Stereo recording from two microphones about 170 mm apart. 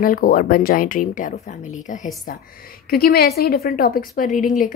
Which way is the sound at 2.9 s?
65° left (ahead or behind).